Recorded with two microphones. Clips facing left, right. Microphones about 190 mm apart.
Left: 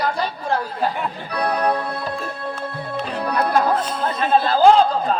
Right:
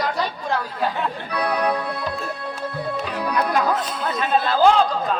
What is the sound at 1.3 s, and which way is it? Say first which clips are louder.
Music: left 2 dB; 40° left (ahead or behind).